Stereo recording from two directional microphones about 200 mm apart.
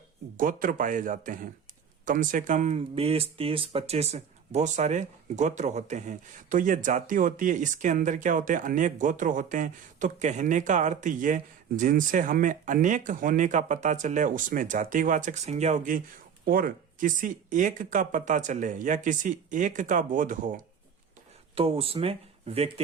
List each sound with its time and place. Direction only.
0.3 s speech: 45° right (ahead or behind)
21.5 s speech: 30° right (ahead or behind)